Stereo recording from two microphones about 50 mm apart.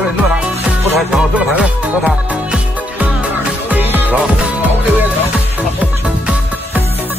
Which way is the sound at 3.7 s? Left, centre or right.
Right.